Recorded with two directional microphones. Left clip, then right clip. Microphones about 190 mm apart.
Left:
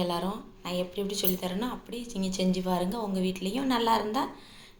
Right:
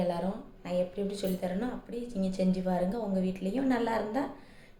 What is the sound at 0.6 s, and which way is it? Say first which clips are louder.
Speech: right 1 dB; 5° right (ahead or behind).